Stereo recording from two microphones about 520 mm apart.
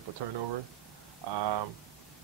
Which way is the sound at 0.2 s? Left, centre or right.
Right.